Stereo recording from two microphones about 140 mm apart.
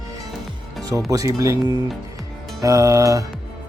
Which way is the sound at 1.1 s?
25° right (ahead or behind).